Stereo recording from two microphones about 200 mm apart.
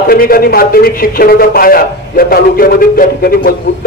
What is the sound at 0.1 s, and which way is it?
A man's voice, 50° left (ahead or behind).